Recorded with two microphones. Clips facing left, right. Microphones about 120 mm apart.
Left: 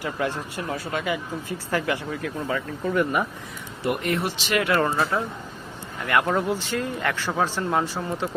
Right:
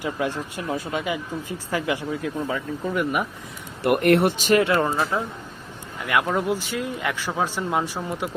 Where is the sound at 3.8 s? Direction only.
65° right (ahead or behind).